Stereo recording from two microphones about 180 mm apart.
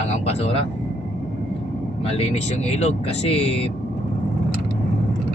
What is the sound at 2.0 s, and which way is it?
Speech, 35° left (ahead or behind).